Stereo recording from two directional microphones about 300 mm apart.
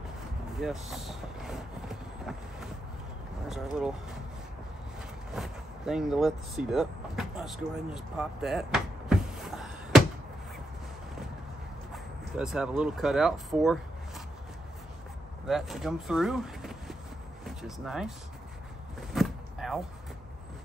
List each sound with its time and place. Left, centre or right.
0.6 s vehicle: centre
3.4 s speech: centre
5.3 s vehicle: centre
11.9 s speech: centre
15.4 s speech: centre
19.1 s a sound: centre